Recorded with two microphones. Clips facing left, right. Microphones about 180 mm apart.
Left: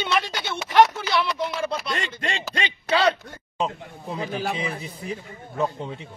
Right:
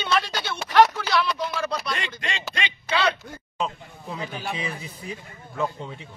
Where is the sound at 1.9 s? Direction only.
45° left (ahead or behind).